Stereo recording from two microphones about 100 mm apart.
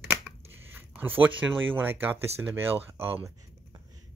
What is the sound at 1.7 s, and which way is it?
Speech, 20° right (ahead or behind).